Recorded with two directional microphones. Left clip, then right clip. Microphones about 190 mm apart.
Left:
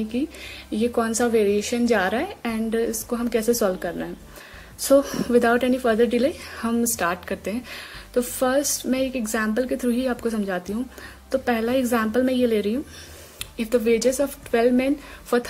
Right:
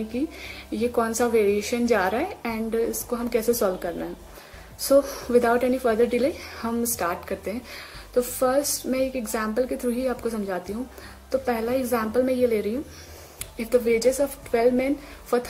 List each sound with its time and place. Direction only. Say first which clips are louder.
0.4 s a woman's voice: left 2 dB; 30° left (ahead or behind)